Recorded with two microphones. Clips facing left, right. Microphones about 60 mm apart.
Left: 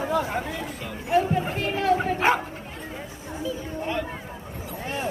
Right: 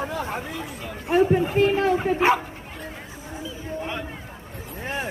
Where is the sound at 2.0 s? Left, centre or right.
Centre.